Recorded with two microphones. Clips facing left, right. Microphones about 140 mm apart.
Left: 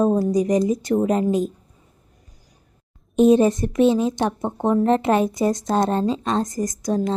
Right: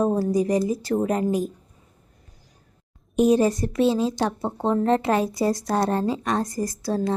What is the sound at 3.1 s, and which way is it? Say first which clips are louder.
Speech: left 4 dB; 20° left (ahead or behind).